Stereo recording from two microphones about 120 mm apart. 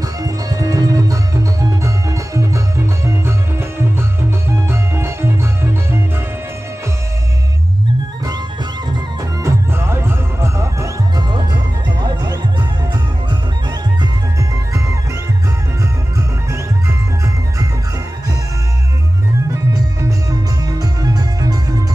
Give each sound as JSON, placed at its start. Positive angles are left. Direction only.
{"t": 0.2, "sound": "music", "side_deg": -30}
{"t": 9.4, "sound": "music", "side_deg": -20}
{"t": 12.0, "sound": "music", "side_deg": -35}
{"t": 19.7, "sound": "music", "side_deg": -30}